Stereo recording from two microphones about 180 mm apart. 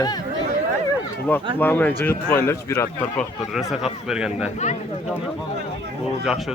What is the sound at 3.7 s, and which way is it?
Speech, centre (ahead or behind).